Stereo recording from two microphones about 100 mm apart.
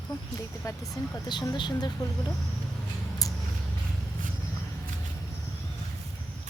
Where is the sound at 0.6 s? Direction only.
30° left (ahead or behind).